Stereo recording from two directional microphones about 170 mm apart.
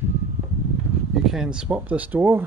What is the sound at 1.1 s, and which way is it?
Speech, 5° right (ahead or behind).